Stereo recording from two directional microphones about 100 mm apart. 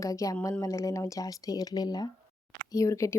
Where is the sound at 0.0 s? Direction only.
35° left (ahead or behind).